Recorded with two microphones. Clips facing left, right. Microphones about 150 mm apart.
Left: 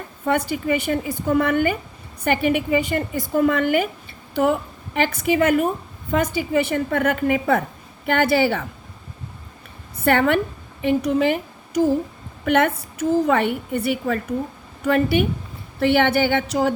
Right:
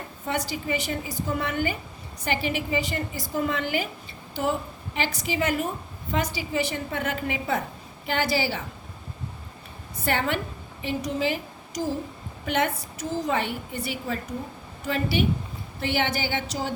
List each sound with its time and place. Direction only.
0.3 s a woman's voice: 55° left (ahead or behind)
4.9 s a woman's voice: 55° left (ahead or behind)
10.0 s a woman's voice: 55° left (ahead or behind)